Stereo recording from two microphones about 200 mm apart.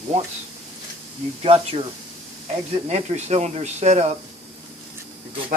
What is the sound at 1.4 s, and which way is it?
Speech, 30° right (ahead or behind).